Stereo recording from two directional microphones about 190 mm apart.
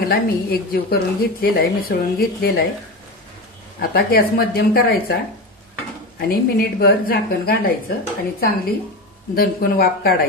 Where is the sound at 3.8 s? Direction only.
50° left (ahead or behind).